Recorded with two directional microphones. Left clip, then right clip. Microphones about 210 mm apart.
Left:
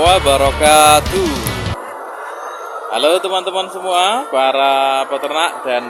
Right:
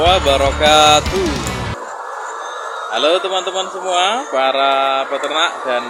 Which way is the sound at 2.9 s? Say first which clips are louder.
Left 1 dB; 10° left (ahead or behind).